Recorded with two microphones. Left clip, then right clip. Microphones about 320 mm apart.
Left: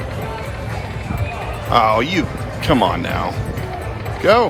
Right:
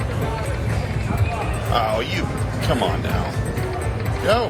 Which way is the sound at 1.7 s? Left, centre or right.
Centre.